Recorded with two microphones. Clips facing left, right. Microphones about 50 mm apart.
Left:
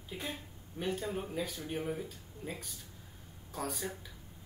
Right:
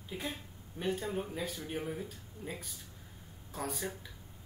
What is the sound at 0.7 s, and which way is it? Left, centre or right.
Speech, centre.